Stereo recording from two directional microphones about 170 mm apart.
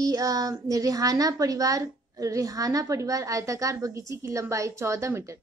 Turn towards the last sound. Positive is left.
turn(degrees=-15)  # may be behind; listen again after turning